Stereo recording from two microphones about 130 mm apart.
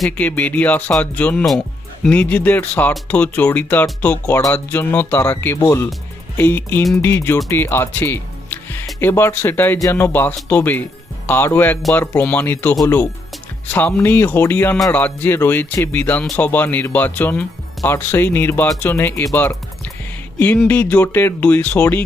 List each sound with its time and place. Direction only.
0.2 s speech: 10° left (ahead or behind)
7.5 s music: 15° left (ahead or behind)
9.0 s speech: 15° left (ahead or behind)
13.7 s speech: 15° left (ahead or behind)
20.7 s speech: 15° left (ahead or behind)